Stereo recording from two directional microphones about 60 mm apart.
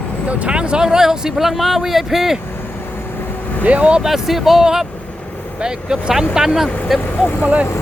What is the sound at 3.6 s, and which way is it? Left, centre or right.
Speech, right.